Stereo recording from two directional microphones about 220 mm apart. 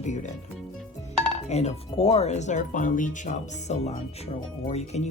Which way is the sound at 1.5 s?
30° left (ahead or behind).